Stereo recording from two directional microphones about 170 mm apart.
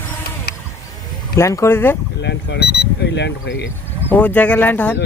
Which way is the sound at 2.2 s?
80° left.